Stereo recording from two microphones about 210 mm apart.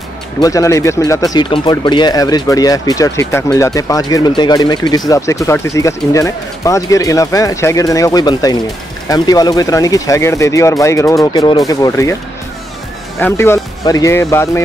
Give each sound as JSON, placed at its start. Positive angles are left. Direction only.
{"t": 0.4, "sound": "speech", "side_deg": 15}
{"t": 13.2, "sound": "speech", "side_deg": 10}